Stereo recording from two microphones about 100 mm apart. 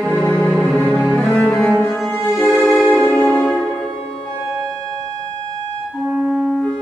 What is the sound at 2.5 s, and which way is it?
Music, 5° right (ahead or behind).